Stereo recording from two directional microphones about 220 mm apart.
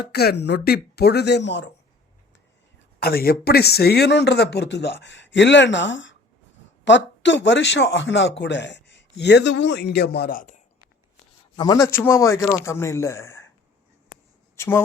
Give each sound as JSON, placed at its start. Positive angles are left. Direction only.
{"t": 0.0, "sound": "a man's voice", "side_deg": 45}
{"t": 3.0, "sound": "a man's voice", "side_deg": 45}
{"t": 11.5, "sound": "a man's voice", "side_deg": 15}
{"t": 14.5, "sound": "speech", "side_deg": 10}